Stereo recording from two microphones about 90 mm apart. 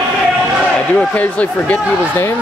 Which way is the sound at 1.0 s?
15° left (ahead or behind).